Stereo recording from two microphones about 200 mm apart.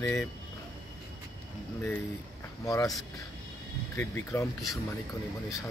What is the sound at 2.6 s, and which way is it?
Speech, 15° left (ahead or behind).